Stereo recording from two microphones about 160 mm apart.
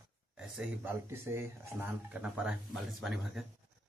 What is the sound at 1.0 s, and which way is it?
Speech, 15° right (ahead or behind).